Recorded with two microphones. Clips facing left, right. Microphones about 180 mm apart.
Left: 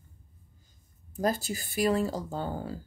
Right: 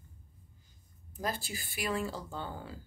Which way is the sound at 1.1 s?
45° left (ahead or behind).